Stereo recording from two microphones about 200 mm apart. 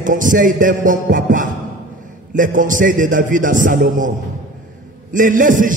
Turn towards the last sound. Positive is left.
turn(degrees=-40)  # may be behind; listen again after turning